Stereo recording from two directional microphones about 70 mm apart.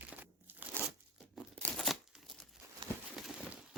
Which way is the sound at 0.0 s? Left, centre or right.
Right.